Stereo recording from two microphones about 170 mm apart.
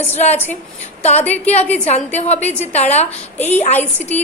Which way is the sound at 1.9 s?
40° left (ahead or behind).